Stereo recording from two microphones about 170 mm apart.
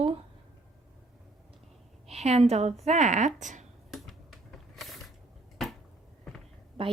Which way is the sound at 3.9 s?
Centre (ahead or behind).